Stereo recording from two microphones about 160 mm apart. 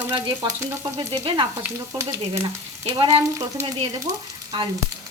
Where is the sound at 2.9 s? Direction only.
25° right (ahead or behind).